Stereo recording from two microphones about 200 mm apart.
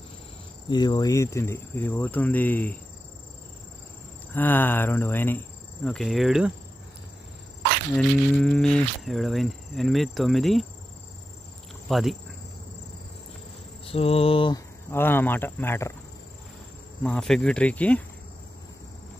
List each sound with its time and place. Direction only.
0.7 s speech: 20° left (ahead or behind)
4.3 s speech: 10° left (ahead or behind)
7.9 s speech: 5° left (ahead or behind)
11.9 s speech: centre (ahead or behind)
13.8 s cricket: 30° left (ahead or behind)
14.9 s speech: 10° left (ahead or behind)
17.0 s speech: 5° left (ahead or behind)